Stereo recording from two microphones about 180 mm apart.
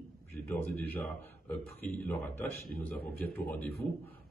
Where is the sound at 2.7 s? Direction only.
60° left (ahead or behind).